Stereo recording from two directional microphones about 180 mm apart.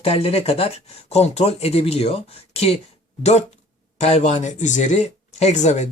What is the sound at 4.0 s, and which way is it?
Speech, 40° left (ahead or behind).